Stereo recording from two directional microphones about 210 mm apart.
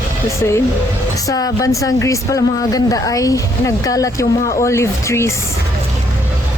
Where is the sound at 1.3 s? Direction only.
15° left (ahead or behind).